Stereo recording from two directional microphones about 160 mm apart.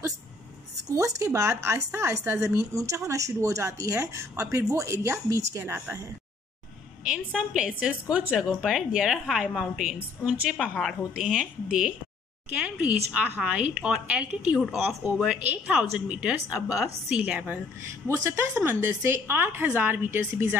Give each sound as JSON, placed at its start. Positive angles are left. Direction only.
{"t": 0.8, "sound": "a woman's voice", "side_deg": -20}
{"t": 7.1, "sound": "a woman's voice", "side_deg": -5}